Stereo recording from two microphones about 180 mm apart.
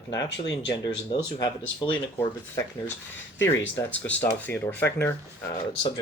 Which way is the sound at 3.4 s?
10° left (ahead or behind).